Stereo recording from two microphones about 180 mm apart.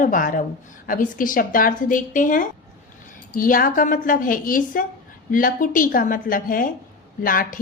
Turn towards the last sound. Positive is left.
turn(degrees=50)  # may be behind; listen again after turning